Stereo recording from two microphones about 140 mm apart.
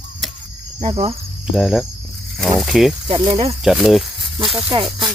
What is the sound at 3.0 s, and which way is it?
Cricket, 35° right (ahead or behind).